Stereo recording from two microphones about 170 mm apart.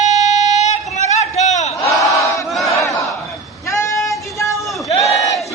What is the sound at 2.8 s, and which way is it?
Battle cry, 15° left (ahead or behind).